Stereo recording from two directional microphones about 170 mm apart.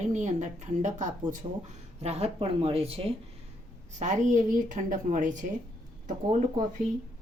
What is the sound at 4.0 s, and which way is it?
Speech, 45° right (ahead or behind).